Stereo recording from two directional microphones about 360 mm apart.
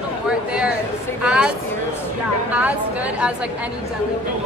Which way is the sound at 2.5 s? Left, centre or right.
Centre.